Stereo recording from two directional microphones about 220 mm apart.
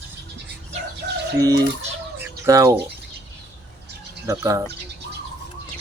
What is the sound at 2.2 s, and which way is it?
Chicken, 10° right (ahead or behind).